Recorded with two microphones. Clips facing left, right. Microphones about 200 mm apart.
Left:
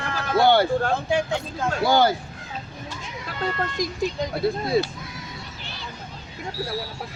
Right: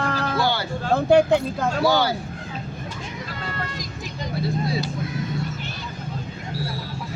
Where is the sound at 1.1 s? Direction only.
60° right (ahead or behind).